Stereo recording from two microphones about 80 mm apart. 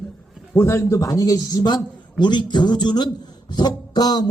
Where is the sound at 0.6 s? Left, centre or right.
Left.